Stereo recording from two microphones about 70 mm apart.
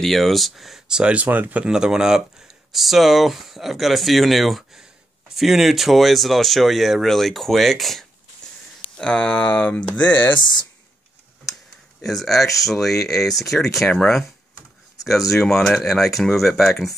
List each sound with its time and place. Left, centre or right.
0.0 s speech: centre
1.2 s speech: right
1.6 s speech: centre
8.9 s speech: centre
12.0 s speech: centre
15.3 s speech: centre